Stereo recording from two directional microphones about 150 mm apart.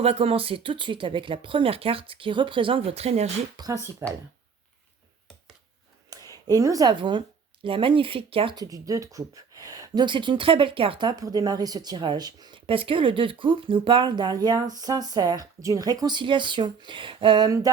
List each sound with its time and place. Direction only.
0.0 s speech: 40° right (ahead or behind)
3.6 s speech: 25° right (ahead or behind)
6.1 s a sound: 25° right (ahead or behind)
6.5 s speech: 25° right (ahead or behind)
8.6 s speech: 20° right (ahead or behind)
11.2 s speech: 25° right (ahead or behind)
12.6 s speech: 35° right (ahead or behind)